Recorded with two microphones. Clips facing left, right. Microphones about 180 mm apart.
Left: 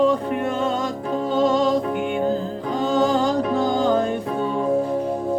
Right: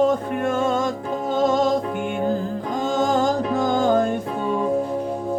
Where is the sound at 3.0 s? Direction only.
45° right (ahead or behind).